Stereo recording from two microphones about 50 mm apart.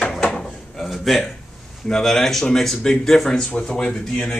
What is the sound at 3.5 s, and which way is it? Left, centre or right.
Speech, left.